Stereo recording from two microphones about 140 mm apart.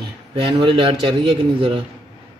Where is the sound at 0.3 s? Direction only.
40° right (ahead or behind).